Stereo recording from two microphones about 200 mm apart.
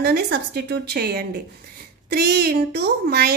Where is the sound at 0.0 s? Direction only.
50° right (ahead or behind).